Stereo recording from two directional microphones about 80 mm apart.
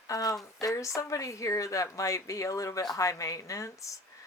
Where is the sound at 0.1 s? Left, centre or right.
Left.